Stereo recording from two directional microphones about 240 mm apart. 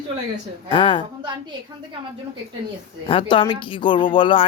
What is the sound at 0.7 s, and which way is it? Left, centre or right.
Speech, centre.